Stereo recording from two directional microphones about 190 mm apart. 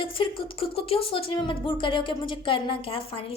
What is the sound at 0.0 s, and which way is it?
Speech, 25° left (ahead or behind).